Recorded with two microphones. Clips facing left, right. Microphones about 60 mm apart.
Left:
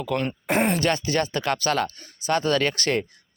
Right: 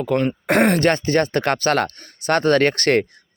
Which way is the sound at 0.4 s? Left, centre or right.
Right.